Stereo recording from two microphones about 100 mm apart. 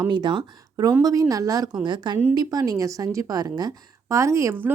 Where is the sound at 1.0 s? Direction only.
35° right (ahead or behind).